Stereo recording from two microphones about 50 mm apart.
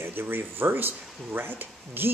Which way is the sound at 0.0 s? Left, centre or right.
Right.